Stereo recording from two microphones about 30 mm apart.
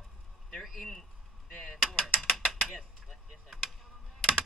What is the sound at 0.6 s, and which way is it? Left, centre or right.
Vehicle, centre.